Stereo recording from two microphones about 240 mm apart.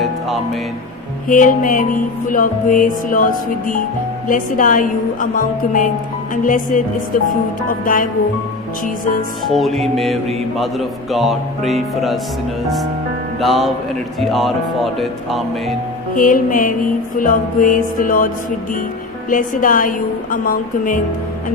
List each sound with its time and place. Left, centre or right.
1.3 s music: left
9.6 s speech: centre
13.4 s speech: centre
16.1 s music: left
19.3 s music: left